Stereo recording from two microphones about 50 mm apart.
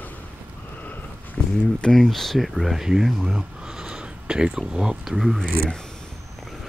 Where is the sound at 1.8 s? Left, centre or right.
Centre.